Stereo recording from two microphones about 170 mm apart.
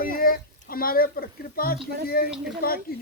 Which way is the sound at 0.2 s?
60° left (ahead or behind).